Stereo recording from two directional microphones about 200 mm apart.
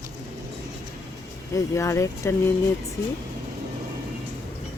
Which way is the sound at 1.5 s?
15° left (ahead or behind).